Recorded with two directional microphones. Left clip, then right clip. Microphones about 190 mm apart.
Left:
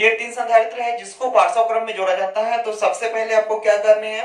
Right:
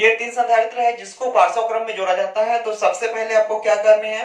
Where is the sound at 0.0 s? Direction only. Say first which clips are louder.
Right 1 dB; 25° left (ahead or behind).